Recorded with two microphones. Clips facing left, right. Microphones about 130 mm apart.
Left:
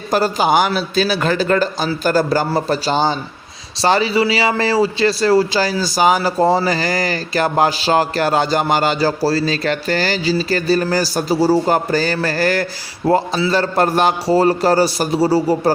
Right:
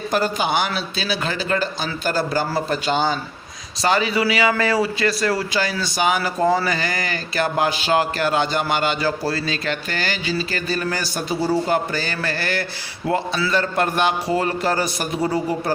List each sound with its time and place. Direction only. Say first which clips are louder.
0.1 s a man's voice: left 6 dB; 40° left (ahead or behind)